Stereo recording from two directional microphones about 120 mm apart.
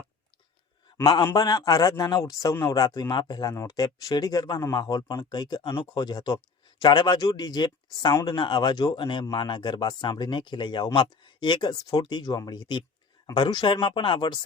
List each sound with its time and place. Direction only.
1.0 s a man's voice: 30° left (ahead or behind)